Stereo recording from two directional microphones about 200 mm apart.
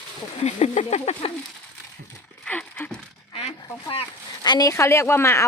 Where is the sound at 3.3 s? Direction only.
30° left (ahead or behind).